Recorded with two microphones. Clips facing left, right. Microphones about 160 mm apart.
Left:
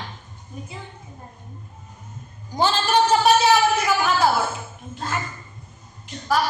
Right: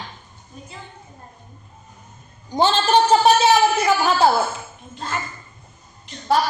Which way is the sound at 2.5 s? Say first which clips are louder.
Right 3 dB; 25° right (ahead or behind).